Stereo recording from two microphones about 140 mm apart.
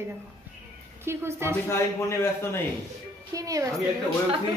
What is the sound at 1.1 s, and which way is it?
Speech, 20° right (ahead or behind).